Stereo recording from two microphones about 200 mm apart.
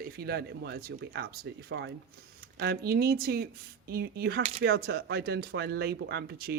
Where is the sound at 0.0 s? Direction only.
50° right (ahead or behind).